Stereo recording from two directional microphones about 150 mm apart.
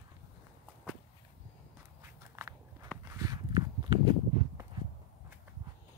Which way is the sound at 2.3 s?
15° right (ahead or behind).